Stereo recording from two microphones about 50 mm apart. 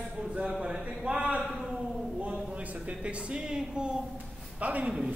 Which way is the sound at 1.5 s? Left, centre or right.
Centre.